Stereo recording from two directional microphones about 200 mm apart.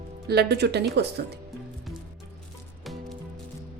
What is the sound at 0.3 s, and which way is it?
Speech, 55° right (ahead or behind).